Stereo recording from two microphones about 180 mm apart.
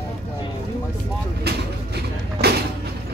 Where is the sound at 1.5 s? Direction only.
65° right (ahead or behind).